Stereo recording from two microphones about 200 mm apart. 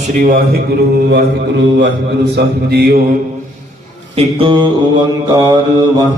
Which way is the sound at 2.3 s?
50° right (ahead or behind).